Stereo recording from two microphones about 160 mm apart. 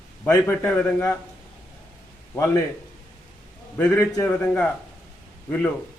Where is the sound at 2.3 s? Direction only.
15° left (ahead or behind).